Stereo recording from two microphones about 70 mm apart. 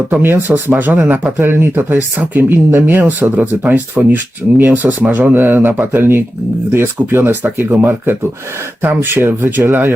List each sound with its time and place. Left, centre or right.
0.1 s speech: right